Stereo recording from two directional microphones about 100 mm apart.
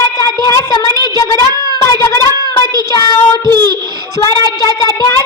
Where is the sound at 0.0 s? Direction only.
35° left (ahead or behind).